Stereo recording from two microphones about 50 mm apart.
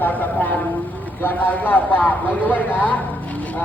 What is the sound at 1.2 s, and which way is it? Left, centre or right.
Speech, left.